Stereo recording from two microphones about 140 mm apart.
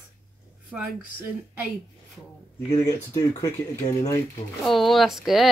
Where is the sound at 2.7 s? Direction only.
25° left (ahead or behind).